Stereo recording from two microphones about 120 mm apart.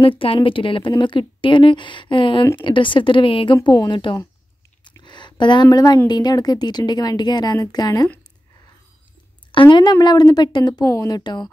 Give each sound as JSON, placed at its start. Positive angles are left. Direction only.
{"t": 0.0, "sound": "a woman's voice", "side_deg": 45}
{"t": 4.8, "sound": "a sound", "side_deg": 40}
{"t": 6.0, "sound": "a woman's voice", "side_deg": 35}
{"t": 9.5, "sound": "a woman's voice", "side_deg": 40}